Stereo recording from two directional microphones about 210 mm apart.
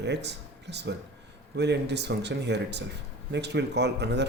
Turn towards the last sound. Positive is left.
turn(degrees=-55)  # may be behind; listen again after turning